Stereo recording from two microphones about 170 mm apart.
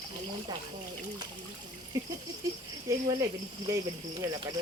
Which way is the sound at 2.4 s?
20° right (ahead or behind).